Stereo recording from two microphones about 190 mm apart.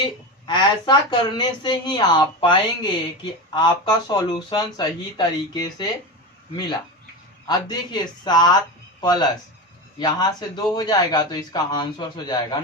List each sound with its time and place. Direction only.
0.0 s speech: 25° left (ahead or behind)
7.4 s speech: 20° left (ahead or behind)